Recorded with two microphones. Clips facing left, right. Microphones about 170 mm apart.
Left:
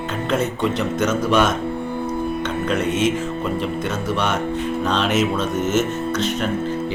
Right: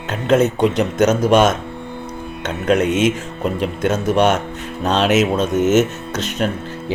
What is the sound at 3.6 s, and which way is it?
Speech, 80° right.